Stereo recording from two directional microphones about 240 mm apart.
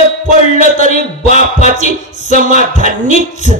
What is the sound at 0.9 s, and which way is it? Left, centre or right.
A man's voice, right.